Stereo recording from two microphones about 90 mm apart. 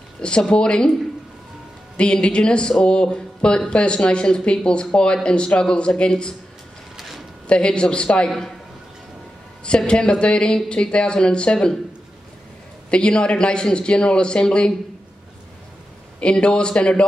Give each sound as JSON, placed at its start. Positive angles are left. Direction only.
{"t": 0.2, "sound": "speech", "side_deg": 10}
{"t": 2.0, "sound": "speech", "side_deg": 10}
{"t": 7.0, "sound": "a sound", "side_deg": 0}
{"t": 7.4, "sound": "speech", "side_deg": 10}
{"t": 9.7, "sound": "speech", "side_deg": 10}
{"t": 12.9, "sound": "speech", "side_deg": 10}
{"t": 16.2, "sound": "speech", "side_deg": 10}